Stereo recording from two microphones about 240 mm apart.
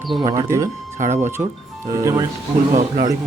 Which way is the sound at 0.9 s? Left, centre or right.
Right.